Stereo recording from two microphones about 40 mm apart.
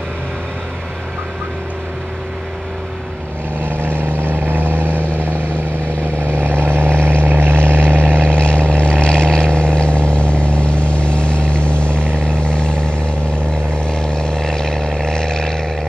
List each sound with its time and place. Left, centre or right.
3.6 s vehicle: right
8.2 s vehicle: left